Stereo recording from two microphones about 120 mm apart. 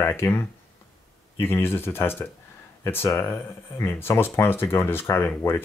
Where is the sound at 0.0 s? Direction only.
20° left (ahead or behind).